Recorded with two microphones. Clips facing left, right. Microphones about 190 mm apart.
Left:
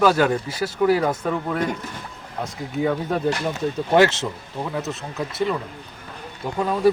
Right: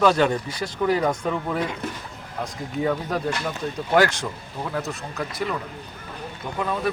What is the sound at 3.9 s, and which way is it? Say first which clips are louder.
Speech: left 3 dB; 25° left (ahead or behind).